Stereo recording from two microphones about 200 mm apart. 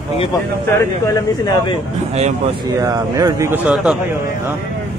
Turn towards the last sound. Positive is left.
turn(degrees=-5)  # may be behind; listen again after turning